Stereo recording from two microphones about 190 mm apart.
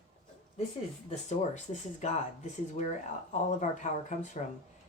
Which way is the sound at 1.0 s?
35° left (ahead or behind).